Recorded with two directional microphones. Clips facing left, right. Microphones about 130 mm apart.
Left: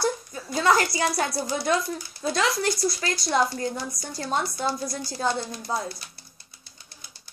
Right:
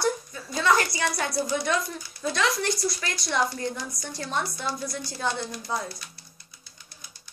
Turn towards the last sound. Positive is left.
turn(degrees=30)  # may be behind; listen again after turning